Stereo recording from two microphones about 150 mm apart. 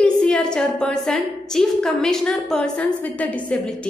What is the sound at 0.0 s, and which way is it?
A woman's voice, 5° left (ahead or behind).